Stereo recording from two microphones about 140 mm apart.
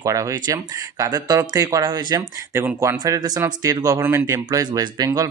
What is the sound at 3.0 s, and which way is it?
Speech, 30° right (ahead or behind).